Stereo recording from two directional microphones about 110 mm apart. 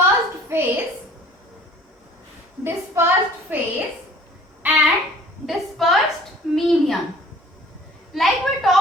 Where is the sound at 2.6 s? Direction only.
25° right (ahead or behind).